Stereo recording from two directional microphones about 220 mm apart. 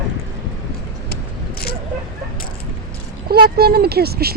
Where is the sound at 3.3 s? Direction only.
45° right (ahead or behind).